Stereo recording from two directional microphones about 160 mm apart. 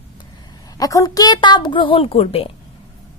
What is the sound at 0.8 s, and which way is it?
A woman's voice, 20° left (ahead or behind).